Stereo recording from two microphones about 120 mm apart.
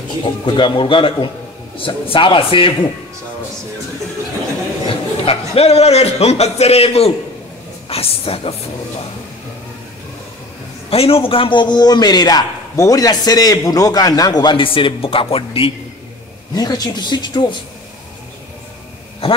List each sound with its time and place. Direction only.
0.2 s a man's voice: 45° left (ahead or behind)
4.8 s a man's voice: 50° left (ahead or behind)
10.9 s a man's voice: 50° left (ahead or behind)
16.5 s a man's voice: 35° left (ahead or behind)